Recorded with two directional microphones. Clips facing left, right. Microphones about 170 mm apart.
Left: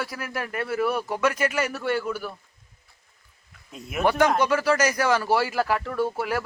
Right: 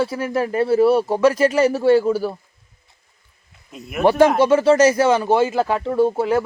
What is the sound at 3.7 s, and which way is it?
Speech, centre (ahead or behind).